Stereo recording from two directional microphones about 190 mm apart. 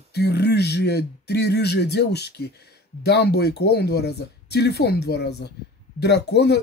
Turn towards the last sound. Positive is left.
turn(degrees=60)  # may be behind; listen again after turning